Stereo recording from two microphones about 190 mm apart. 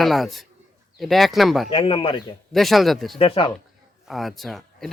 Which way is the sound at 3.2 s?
30° left (ahead or behind).